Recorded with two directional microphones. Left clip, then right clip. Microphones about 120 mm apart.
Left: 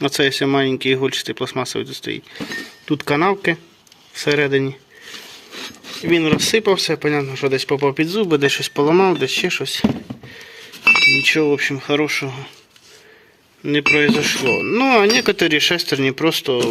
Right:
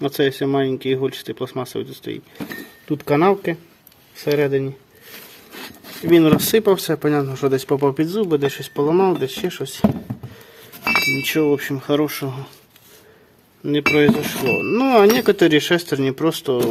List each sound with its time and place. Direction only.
0.0 s speech: 10° right (ahead or behind)
2.8 s speech: 5° right (ahead or behind)
6.1 s speech: 55° right (ahead or behind)
6.9 s speech: 50° right (ahead or behind)
7.9 s speech: 35° right (ahead or behind)
8.2 s speech: 10° right (ahead or behind)
11.2 s speech: 45° right (ahead or behind)
13.7 s speech: 25° right (ahead or behind)
15.0 s speech: 20° right (ahead or behind)